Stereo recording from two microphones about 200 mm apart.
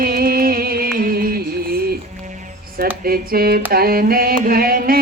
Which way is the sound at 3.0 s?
50° right (ahead or behind).